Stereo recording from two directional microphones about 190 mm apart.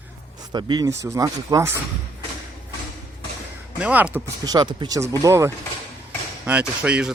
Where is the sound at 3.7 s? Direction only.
5° right (ahead or behind).